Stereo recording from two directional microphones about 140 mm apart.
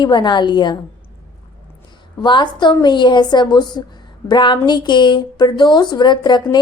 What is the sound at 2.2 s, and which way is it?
A woman's voice, 35° left (ahead or behind).